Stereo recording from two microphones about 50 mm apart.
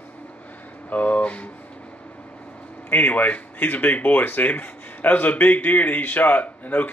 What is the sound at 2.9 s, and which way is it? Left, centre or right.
Speech, left.